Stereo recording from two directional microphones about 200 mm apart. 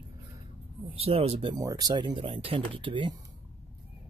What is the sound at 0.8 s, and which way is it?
Speech, 30° right (ahead or behind).